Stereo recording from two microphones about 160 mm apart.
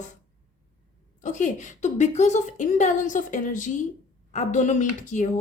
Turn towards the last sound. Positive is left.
turn(degrees=50)  # may be behind; listen again after turning